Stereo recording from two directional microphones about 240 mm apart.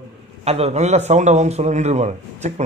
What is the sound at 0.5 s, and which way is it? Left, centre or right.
A man's voice, right.